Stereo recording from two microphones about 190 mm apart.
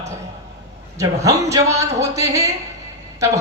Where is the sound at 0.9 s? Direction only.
15° right (ahead or behind).